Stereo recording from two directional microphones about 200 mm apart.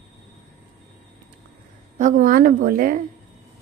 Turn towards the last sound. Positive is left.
turn(degrees=-45)  # may be behind; listen again after turning